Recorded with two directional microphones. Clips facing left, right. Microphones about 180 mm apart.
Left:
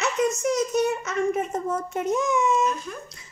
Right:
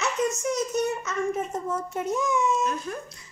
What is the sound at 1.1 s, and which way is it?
A child's voice, 80° left.